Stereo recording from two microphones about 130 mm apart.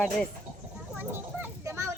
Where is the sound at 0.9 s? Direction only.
15° right (ahead or behind).